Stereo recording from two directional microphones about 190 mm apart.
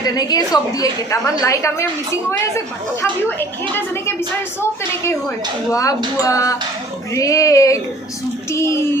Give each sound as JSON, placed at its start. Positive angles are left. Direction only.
{"t": 0.0, "sound": "a woman's voice", "side_deg": 20}
{"t": 3.0, "sound": "a woman's voice", "side_deg": 10}
{"t": 5.7, "sound": "a woman's voice", "side_deg": 15}